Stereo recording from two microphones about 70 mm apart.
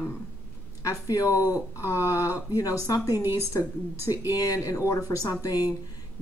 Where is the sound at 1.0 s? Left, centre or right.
Left.